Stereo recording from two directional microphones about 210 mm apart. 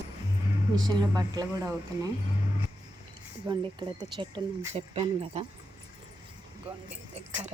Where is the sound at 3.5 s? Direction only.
20° right (ahead or behind).